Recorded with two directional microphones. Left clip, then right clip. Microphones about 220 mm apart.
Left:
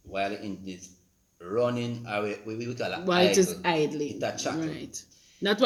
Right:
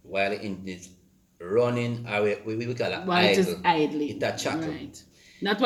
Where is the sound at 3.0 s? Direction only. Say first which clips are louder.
Even; 50° left (ahead or behind).